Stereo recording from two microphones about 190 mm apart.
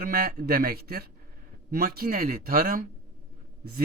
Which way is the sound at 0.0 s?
50° right (ahead or behind).